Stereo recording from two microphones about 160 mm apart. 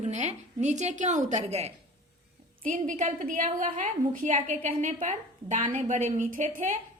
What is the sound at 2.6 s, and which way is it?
A woman's voice, 55° right (ahead or behind).